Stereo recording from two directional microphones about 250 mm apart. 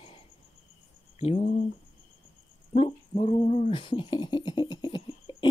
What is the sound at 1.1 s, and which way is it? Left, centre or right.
Speech, left.